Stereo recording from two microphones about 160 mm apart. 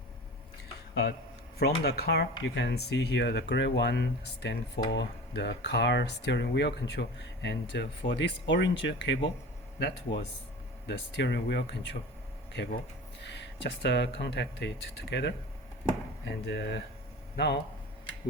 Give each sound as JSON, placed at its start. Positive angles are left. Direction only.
{"t": 1.5, "sound": "speech", "side_deg": 75}
{"t": 16.5, "sound": "a man's voice", "side_deg": 90}